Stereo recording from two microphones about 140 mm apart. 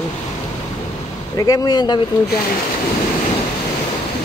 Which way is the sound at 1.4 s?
25° left (ahead or behind).